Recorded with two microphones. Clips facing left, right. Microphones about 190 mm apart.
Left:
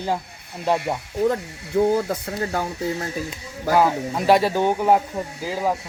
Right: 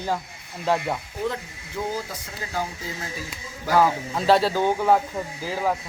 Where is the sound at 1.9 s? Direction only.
60° left (ahead or behind).